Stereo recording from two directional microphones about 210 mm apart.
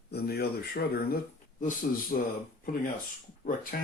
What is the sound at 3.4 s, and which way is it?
Speech, 40° left (ahead or behind).